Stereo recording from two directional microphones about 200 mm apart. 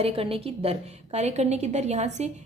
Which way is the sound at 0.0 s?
30° right (ahead or behind).